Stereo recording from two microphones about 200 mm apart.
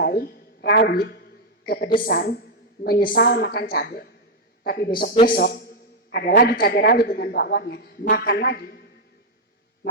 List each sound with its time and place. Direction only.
0.0 s a woman's voice: 50° left (ahead or behind)